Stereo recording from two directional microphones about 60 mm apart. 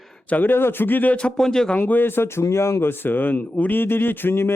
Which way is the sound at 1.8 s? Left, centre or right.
Left.